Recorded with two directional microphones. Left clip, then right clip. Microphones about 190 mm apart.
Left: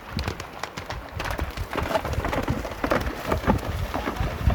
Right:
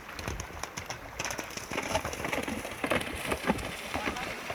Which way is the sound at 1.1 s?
55° right (ahead or behind).